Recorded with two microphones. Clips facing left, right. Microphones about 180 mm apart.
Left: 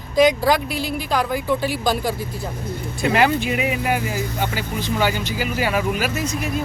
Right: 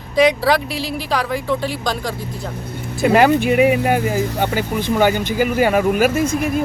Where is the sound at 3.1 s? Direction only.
50° right (ahead or behind).